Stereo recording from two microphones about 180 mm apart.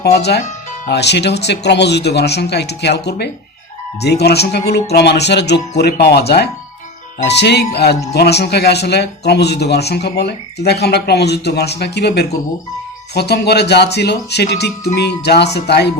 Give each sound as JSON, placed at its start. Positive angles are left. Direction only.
{"t": 0.0, "sound": "speech", "side_deg": 65}